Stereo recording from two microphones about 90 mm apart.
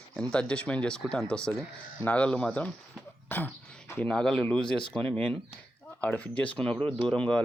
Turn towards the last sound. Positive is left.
turn(degrees=10)  # may be behind; listen again after turning